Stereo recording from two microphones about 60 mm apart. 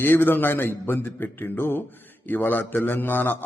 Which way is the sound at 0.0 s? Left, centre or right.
Left.